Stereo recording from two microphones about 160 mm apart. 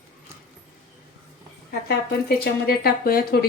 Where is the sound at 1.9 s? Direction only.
80° left.